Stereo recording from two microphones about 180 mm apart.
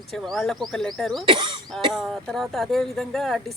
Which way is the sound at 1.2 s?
30° right (ahead or behind).